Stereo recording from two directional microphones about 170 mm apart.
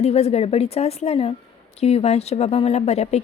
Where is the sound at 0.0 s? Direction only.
40° left (ahead or behind).